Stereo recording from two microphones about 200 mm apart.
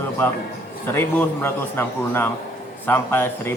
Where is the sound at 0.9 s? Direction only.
10° left (ahead or behind).